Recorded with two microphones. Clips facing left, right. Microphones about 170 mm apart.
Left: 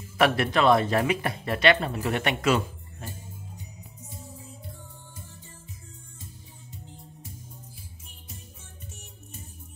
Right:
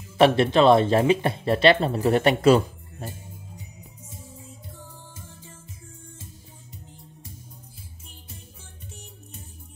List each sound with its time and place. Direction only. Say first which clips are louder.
0.2 s speech: right 5 dB; 25° right (ahead or behind)